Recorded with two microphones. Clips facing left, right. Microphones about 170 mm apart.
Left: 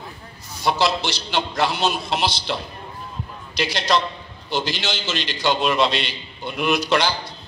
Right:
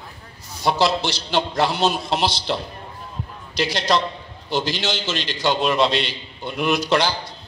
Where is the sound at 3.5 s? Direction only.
40° right (ahead or behind).